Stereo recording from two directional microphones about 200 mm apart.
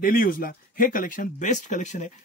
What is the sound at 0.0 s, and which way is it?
Speech, 45° left (ahead or behind).